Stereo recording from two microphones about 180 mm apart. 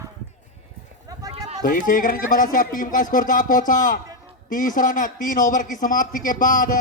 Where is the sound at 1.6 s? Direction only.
50° left (ahead or behind).